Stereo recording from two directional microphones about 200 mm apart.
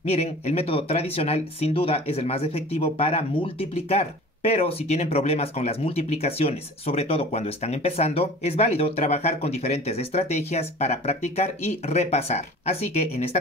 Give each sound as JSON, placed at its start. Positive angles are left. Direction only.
{"t": 0.0, "sound": "speech", "side_deg": 30}